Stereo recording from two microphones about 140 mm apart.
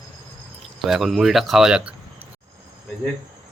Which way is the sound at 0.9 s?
Centre (ahead or behind).